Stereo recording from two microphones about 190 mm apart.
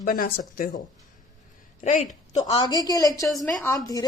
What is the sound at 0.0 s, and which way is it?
Speech, 50° left (ahead or behind).